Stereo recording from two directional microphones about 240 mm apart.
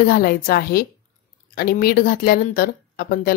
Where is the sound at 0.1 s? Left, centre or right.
Left.